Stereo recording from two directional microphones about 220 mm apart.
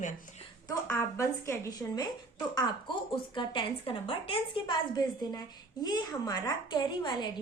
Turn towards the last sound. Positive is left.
turn(degrees=20)  # may be behind; listen again after turning